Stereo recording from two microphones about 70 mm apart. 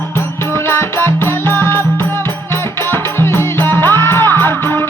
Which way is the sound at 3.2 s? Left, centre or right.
Left.